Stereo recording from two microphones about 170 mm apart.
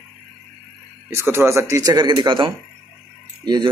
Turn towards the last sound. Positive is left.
turn(degrees=-25)  # may be behind; listen again after turning